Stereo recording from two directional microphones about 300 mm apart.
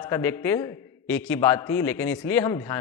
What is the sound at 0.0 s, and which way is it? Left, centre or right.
A man's voice, centre.